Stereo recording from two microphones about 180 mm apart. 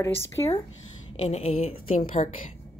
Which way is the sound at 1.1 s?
35° left (ahead or behind).